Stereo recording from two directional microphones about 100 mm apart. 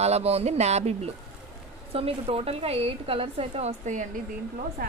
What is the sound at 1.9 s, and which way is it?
A woman's voice, 75° right (ahead or behind).